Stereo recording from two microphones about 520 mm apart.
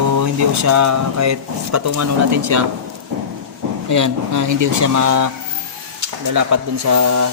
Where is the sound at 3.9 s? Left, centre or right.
Right.